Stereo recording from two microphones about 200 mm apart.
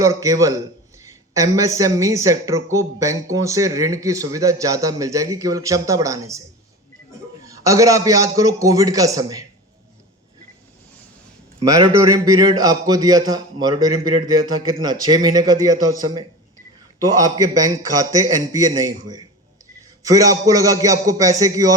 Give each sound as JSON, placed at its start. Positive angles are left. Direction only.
{"t": 0.0, "sound": "a man's voice", "side_deg": -15}
{"t": 7.4, "sound": "a man's voice", "side_deg": -15}
{"t": 11.6, "sound": "a man's voice", "side_deg": -15}